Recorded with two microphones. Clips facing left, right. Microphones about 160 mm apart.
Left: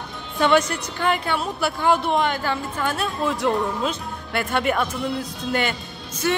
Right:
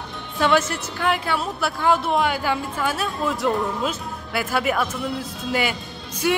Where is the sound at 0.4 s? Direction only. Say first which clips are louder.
Left 1 dB; 5° right (ahead or behind).